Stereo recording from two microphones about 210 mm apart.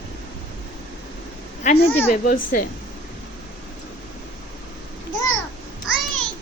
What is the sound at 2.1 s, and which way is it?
Speech, 40° left (ahead or behind).